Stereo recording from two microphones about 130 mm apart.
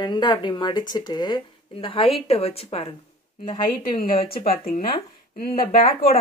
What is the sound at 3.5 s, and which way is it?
A woman's voice, 90° left.